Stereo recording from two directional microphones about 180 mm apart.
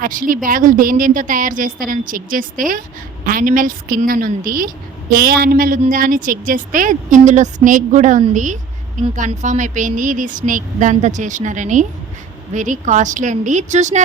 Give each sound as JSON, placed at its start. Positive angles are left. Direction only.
{"t": 0.0, "sound": "speech", "side_deg": -50}